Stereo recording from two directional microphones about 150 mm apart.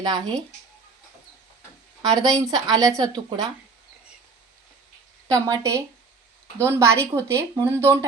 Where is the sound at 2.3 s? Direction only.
25° right (ahead or behind).